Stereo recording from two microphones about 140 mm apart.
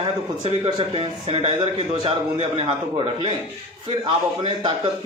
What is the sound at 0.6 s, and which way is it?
A man's voice, 40° right (ahead or behind).